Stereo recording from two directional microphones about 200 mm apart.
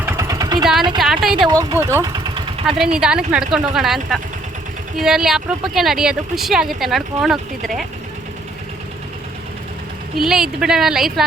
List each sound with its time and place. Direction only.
0.0 s vehicle: 15° right (ahead or behind)
1.0 s speech: centre (ahead or behind)
1.5 s speech: 15° right (ahead or behind)
2.6 s speech: centre (ahead or behind)
10.2 s speech: centre (ahead or behind)